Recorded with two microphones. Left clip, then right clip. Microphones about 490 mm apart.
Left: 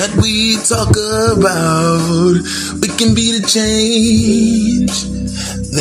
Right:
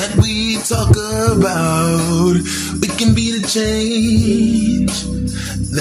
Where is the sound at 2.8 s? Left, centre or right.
Right.